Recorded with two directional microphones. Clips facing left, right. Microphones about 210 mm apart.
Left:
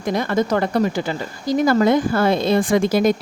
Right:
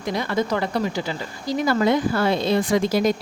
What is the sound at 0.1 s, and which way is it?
Speech, 50° left (ahead or behind).